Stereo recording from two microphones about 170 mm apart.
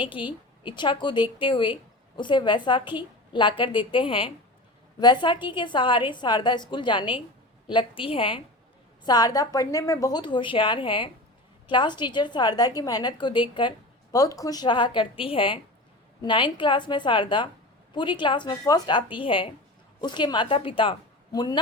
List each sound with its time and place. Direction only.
0.6 s a woman's voice: 25° left (ahead or behind)